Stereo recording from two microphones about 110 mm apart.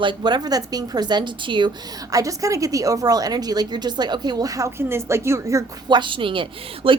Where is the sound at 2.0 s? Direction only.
30° right (ahead or behind).